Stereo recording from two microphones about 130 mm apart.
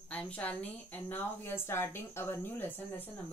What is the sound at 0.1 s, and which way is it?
A woman's voice, 10° left (ahead or behind).